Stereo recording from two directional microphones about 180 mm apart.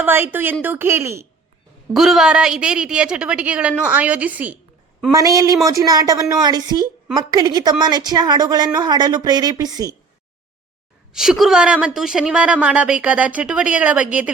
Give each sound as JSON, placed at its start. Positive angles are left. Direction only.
{"t": 0.0, "sound": "speech", "side_deg": -10}
{"t": 1.9, "sound": "a woman's voice", "side_deg": 0}
{"t": 5.1, "sound": "a woman's voice", "side_deg": -20}
{"t": 11.1, "sound": "a woman's voice", "side_deg": -5}